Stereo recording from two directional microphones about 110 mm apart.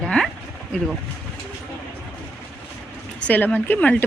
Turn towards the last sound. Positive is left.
turn(degrees=15)  # may be behind; listen again after turning